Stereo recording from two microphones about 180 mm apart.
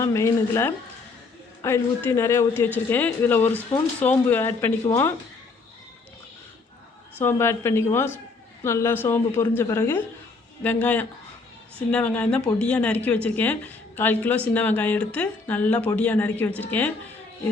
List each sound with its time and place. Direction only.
0.0 s a woman's voice: 15° left (ahead or behind)
7.2 s a woman's voice: 15° left (ahead or behind)